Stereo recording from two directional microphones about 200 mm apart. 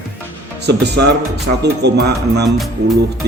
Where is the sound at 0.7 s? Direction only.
55° right (ahead or behind).